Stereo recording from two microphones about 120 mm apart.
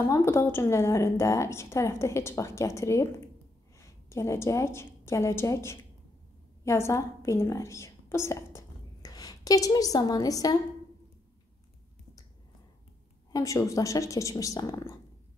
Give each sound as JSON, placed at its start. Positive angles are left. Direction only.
{"t": 0.1, "sound": "a woman's voice", "side_deg": 20}
{"t": 13.3, "sound": "a woman's voice", "side_deg": 25}